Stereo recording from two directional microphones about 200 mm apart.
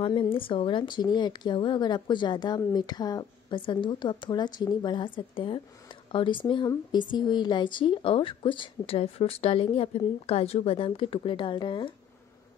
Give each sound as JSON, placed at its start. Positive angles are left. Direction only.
{"t": 0.0, "sound": "speech", "side_deg": 25}